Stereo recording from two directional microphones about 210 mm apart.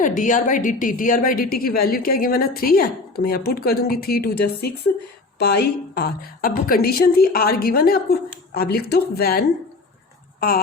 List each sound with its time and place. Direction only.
0.0 s a woman's voice: 40° left (ahead or behind)